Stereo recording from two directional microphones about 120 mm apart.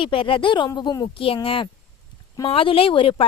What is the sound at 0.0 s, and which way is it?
A woman's voice, 45° left (ahead or behind).